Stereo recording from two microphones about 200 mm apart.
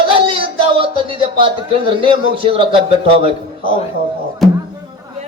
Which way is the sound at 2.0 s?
25° right (ahead or behind).